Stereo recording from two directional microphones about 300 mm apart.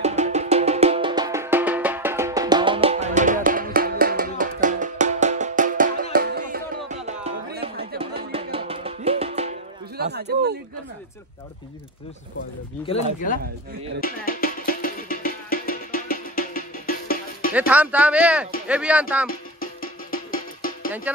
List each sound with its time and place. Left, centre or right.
0.0 s music: right
8.0 s music: centre
9.9 s a sound: right
12.8 s speech: left
14.0 s music: left
17.6 s speech: centre
19.6 s music: left